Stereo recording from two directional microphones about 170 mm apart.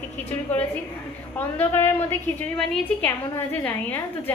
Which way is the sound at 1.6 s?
10° left (ahead or behind).